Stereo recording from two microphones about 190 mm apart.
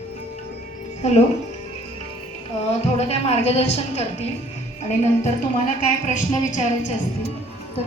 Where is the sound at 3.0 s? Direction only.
35° left (ahead or behind).